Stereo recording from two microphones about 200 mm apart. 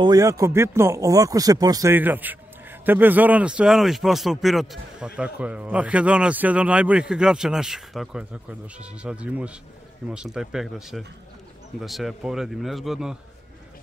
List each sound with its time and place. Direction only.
0.0 s speech: 20° right (ahead or behind); by 13.2 s centre (ahead or behind)